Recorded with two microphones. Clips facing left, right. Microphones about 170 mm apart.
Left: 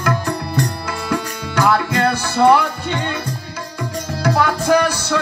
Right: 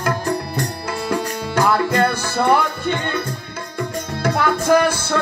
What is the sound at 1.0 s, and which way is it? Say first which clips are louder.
Music: right 1 dB; 45° right (ahead or behind).